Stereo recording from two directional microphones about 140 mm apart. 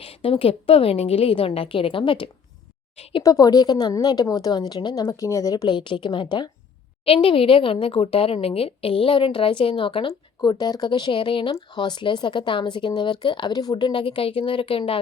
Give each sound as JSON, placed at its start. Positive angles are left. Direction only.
{"t": 0.0, "sound": "speech", "side_deg": 40}
{"t": 3.2, "sound": "a woman's voice", "side_deg": 25}